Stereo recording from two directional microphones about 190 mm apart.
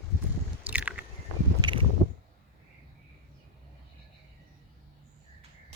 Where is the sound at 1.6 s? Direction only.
25° right (ahead or behind).